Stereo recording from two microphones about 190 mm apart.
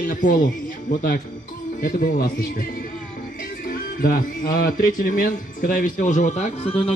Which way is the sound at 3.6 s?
50° left (ahead or behind).